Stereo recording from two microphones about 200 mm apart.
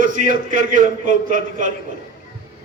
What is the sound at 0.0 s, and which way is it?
A man's voice, 40° right (ahead or behind).